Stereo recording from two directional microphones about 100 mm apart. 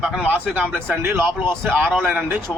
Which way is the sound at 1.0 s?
25° right (ahead or behind).